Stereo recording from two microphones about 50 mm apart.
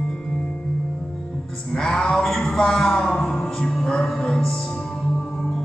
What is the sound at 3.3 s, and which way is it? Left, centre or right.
Music, centre.